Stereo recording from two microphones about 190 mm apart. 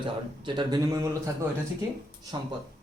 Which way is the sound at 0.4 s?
25° right (ahead or behind).